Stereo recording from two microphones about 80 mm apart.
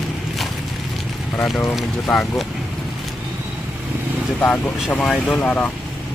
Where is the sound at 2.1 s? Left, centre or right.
Centre.